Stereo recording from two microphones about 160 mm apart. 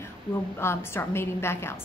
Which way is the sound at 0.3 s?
15° left (ahead or behind).